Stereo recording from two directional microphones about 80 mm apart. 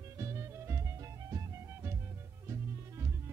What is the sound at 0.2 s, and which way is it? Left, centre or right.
Music, right.